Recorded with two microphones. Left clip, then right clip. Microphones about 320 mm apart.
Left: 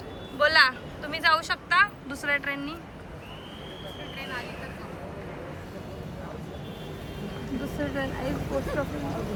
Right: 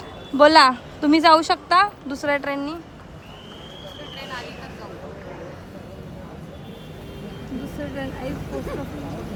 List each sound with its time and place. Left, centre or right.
0.3 s a woman's voice: centre
7.2 s speech: centre